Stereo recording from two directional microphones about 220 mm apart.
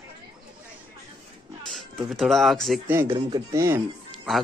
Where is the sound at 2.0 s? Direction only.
Centre (ahead or behind).